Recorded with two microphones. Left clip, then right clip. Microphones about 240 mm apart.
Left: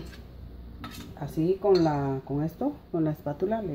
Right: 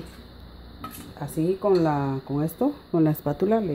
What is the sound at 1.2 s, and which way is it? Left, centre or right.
Speech, right.